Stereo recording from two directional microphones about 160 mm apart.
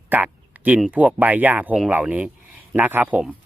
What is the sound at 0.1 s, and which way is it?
Speech, 10° right (ahead or behind).